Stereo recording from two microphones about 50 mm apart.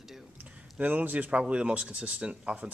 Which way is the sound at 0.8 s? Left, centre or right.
Right.